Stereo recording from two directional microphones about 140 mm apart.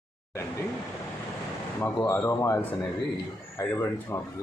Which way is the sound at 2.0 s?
20° left (ahead or behind).